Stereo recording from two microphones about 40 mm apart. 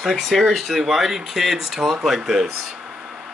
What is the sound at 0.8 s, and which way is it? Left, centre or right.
Speech, centre.